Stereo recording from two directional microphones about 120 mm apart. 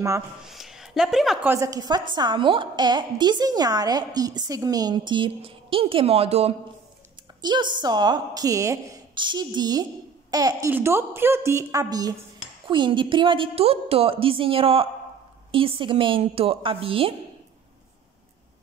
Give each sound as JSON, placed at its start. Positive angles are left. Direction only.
{"t": 0.5, "sound": "a sound", "side_deg": -5}
{"t": 1.4, "sound": "a woman's voice", "side_deg": -20}
{"t": 1.7, "sound": "a woman's voice", "side_deg": -35}
{"t": 7.4, "sound": "a woman's voice", "side_deg": -40}
{"t": 9.1, "sound": "a woman's voice", "side_deg": -40}